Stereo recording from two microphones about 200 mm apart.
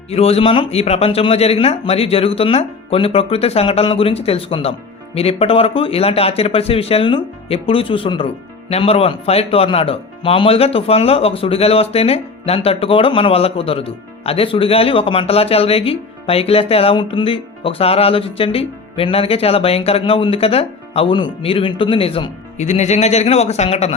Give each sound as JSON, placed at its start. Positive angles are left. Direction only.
{"t": 0.1, "sound": "speech", "side_deg": 30}